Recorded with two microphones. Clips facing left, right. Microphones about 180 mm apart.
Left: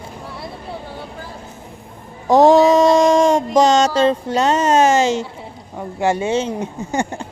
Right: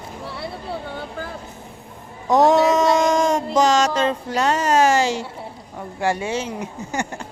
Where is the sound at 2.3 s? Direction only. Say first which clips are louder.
Left 5 dB; 30° left (ahead or behind).